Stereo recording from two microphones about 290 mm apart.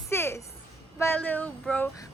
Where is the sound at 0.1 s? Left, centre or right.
Centre.